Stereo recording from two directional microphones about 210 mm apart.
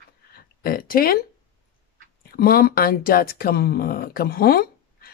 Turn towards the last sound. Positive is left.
turn(degrees=45)  # may be behind; listen again after turning